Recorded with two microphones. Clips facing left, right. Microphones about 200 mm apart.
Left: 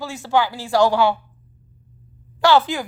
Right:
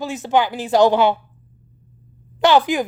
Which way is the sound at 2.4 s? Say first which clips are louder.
Right 2 dB; 20° right (ahead or behind).